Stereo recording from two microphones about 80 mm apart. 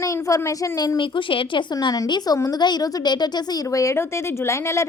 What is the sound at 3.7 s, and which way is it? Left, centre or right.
Speech, left.